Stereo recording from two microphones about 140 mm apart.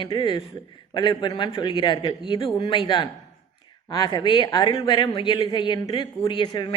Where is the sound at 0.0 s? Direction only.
35° left (ahead or behind).